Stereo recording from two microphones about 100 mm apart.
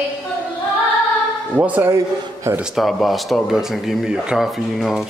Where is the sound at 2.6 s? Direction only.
Centre (ahead or behind).